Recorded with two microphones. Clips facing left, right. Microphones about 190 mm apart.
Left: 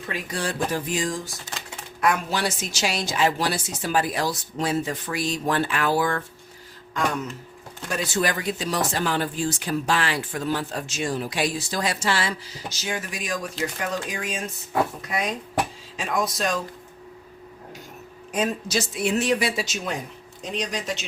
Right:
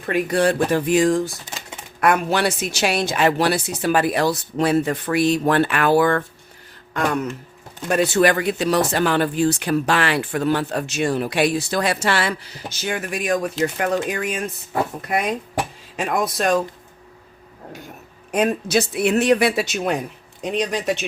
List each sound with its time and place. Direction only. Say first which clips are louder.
0.0 s speech: right 11 dB; 60° right (ahead or behind)
18.3 s speech: right 6 dB; 60° right (ahead or behind)